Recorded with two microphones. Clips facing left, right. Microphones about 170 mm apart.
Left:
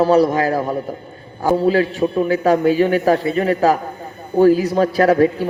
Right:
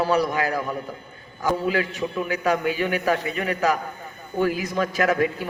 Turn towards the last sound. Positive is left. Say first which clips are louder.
# left 8 dB
turn(degrees=40)  # may be behind; listen again after turning